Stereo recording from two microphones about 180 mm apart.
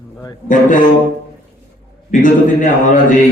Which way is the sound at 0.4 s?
45° left (ahead or behind).